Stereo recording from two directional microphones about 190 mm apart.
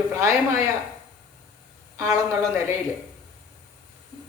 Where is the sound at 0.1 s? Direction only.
15° right (ahead or behind).